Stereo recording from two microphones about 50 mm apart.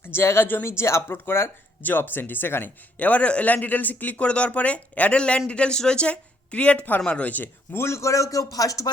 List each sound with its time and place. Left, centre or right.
0.0 s speech: left
1.1 s speech: left
1.8 s speech: left
3.0 s speech: left
4.2 s speech: left
7.7 s speech: left
7.9 s a man's voice: left